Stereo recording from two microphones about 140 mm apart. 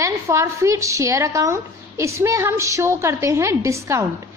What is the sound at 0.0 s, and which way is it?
A woman's voice, 20° right (ahead or behind).